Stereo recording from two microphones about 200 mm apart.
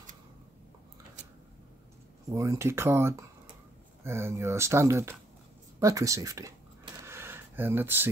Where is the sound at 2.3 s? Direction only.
15° right (ahead or behind).